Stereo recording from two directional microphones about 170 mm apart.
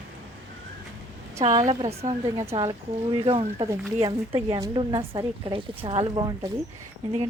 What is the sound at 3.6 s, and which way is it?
Speech, 20° right (ahead or behind).